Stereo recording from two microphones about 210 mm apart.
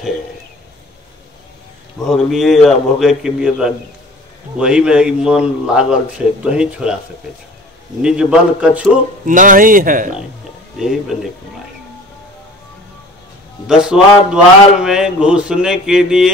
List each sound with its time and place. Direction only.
2.0 s speech: centre (ahead or behind)
8.0 s speech: 5° right (ahead or behind)
9.2 s speech: 40° right (ahead or behind)
10.8 s speech: centre (ahead or behind)
13.7 s speech: 5° right (ahead or behind)